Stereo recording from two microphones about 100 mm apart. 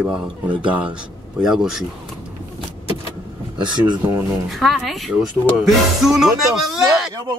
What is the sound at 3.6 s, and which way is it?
Speech, 45° right (ahead or behind).